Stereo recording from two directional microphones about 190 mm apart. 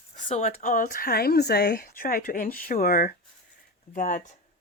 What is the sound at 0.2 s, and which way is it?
Speech, 40° left (ahead or behind).